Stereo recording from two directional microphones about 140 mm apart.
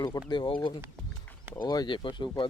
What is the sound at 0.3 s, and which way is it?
Speech, 35° left (ahead or behind).